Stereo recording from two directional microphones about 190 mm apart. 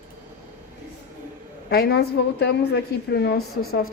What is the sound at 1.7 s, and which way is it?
A woman's voice, 55° left (ahead or behind).